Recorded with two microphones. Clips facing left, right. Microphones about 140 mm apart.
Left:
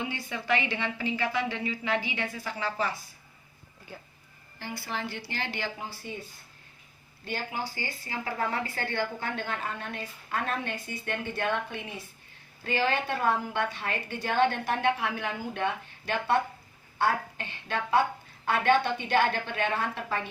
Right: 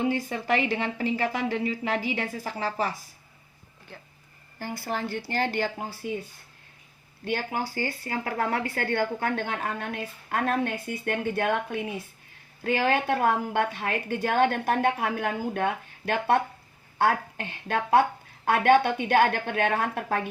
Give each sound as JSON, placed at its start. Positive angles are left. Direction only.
{"t": 0.0, "sound": "a woman's voice", "side_deg": -45}
{"t": 4.6, "sound": "a woman's voice", "side_deg": -45}
{"t": 7.3, "sound": "a woman's voice", "side_deg": -55}